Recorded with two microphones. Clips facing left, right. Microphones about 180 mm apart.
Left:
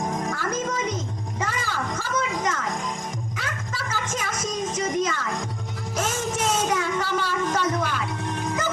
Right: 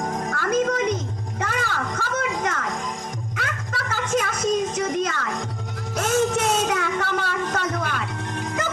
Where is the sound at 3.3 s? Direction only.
60° right (ahead or behind).